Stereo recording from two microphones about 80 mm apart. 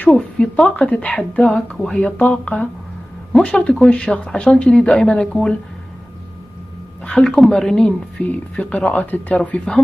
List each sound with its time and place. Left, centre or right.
0.0 s speech: centre
7.1 s speech: centre